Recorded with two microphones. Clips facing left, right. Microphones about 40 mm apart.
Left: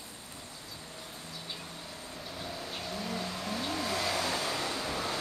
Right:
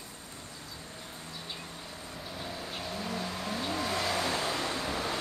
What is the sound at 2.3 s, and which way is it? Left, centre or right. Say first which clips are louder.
Vehicle: right 1 dB; centre.